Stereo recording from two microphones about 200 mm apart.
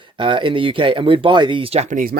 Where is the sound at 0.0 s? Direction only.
25° right (ahead or behind).